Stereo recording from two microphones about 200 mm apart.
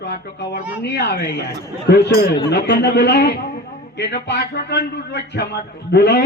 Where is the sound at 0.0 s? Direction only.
55° left (ahead or behind).